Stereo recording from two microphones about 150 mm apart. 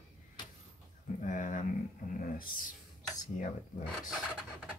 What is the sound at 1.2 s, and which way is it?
Speech, 55° left (ahead or behind).